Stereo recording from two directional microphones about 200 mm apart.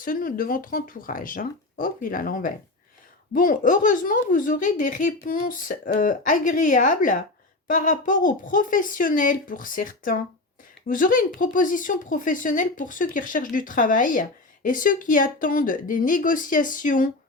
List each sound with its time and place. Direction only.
0.0 s speech: 45° left (ahead or behind)